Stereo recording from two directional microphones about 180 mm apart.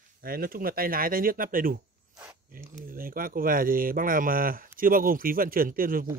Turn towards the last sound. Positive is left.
turn(degrees=-50)  # may be behind; listen again after turning